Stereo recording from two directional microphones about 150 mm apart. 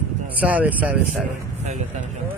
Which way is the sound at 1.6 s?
50° right (ahead or behind).